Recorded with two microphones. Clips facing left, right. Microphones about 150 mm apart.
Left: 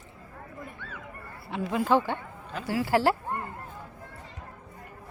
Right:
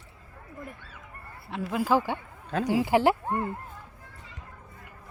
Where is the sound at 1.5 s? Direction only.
Centre (ahead or behind); by 3.2 s 20° right (ahead or behind).